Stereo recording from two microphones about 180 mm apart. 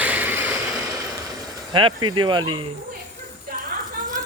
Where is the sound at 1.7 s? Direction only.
25° right (ahead or behind).